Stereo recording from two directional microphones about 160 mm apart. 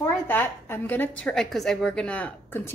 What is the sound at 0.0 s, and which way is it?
A woman's voice, 10° left (ahead or behind).